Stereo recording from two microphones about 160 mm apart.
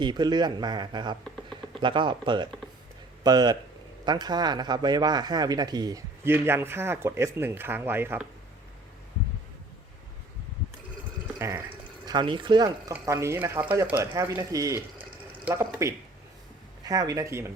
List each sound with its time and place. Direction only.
0.0 s speech: 25° right (ahead or behind)
11.3 s water: 15° right (ahead or behind)
12.0 s speech: 30° right (ahead or behind)
12.9 s speech: 15° right (ahead or behind)